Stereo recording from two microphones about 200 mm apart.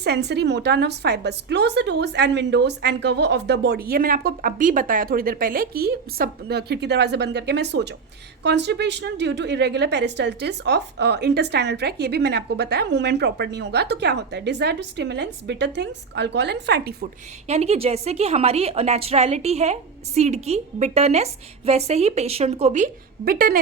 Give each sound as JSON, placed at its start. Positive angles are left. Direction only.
{"t": 0.0, "sound": "a woman's voice", "side_deg": -55}
{"t": 17.5, "sound": "a woman's voice", "side_deg": -30}